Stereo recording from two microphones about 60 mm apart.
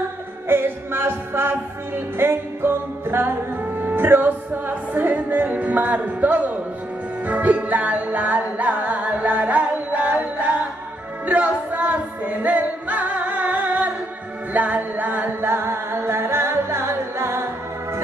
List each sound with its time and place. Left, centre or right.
0.5 s music: right
11.2 s music: right
15.4 s music: right